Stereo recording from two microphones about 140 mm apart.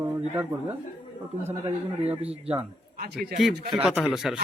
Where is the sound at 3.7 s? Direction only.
10° right (ahead or behind).